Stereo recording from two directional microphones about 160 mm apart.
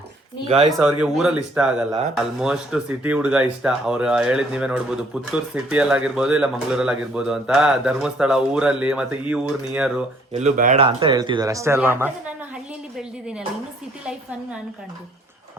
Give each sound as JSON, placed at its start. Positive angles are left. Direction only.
{"t": 0.7, "sound": "speech", "side_deg": -5}
{"t": 10.3, "sound": "speech", "side_deg": -50}
{"t": 10.8, "sound": "speech", "side_deg": -35}
{"t": 13.0, "sound": "a sound", "side_deg": -5}